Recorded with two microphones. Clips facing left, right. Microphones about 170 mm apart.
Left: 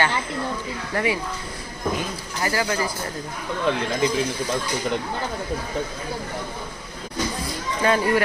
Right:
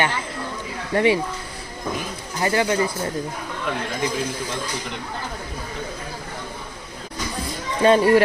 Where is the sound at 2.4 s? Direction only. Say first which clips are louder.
Right 4 dB; 25° right (ahead or behind).